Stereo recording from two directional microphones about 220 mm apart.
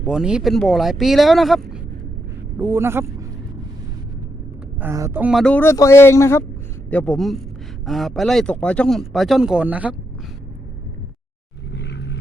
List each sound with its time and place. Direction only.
0.0 s speech: 5° right (ahead or behind)
2.6 s a man's voice: 10° right (ahead or behind)
4.8 s speech: 15° right (ahead or behind)
11.7 s vehicle: 50° left (ahead or behind)